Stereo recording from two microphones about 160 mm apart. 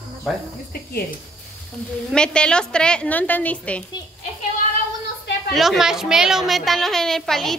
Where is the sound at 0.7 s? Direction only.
75° left (ahead or behind).